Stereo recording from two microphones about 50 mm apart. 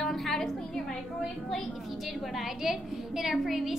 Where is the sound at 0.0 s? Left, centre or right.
Centre.